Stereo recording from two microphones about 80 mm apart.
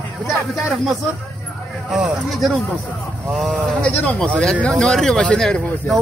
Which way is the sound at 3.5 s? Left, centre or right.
Centre.